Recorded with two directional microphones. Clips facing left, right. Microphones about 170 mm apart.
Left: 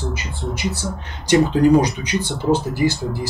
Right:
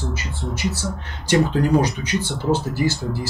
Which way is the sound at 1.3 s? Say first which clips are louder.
Left 4 dB; 15° left (ahead or behind).